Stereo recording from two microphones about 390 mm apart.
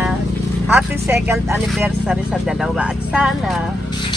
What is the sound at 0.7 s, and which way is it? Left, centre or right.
Speech, centre.